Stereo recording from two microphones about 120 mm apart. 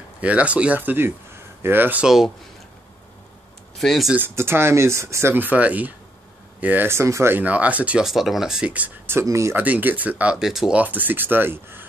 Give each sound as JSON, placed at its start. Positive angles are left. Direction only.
{"t": 0.2, "sound": "speech", "side_deg": -10}
{"t": 2.0, "sound": "speech", "side_deg": 0}
{"t": 3.7, "sound": "speech", "side_deg": 0}
{"t": 4.1, "sound": "speech", "side_deg": -20}
{"t": 9.6, "sound": "speech", "side_deg": -15}